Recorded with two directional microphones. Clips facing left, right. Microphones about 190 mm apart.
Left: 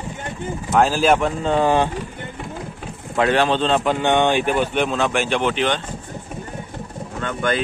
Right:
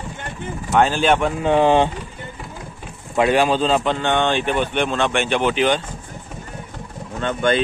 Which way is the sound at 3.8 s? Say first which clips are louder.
Left 2 dB; 10° left (ahead or behind).